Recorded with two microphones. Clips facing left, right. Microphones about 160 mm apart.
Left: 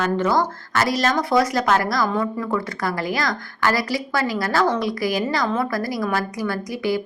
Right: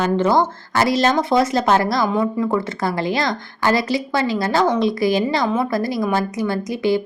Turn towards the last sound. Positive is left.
turn(degrees=-25)  # may be behind; listen again after turning